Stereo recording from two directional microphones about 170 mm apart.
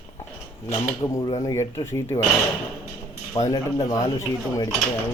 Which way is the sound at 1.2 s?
20° left (ahead or behind).